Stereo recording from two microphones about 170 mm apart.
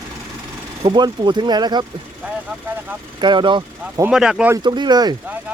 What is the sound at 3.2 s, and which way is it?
Speech, 25° right (ahead or behind).